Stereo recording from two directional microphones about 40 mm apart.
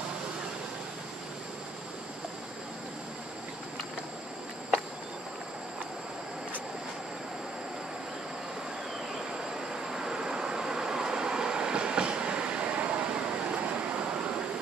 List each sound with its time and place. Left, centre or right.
9.8 s train: centre; by 14.4 s right